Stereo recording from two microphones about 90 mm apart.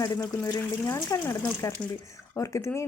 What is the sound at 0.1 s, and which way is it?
Speech, 45° left (ahead or behind).